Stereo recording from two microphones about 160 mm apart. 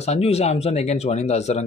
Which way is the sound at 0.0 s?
40° left (ahead or behind).